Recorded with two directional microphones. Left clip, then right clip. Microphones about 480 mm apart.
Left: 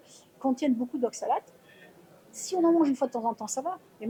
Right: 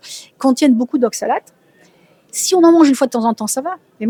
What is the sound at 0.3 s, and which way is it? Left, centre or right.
Speech, right.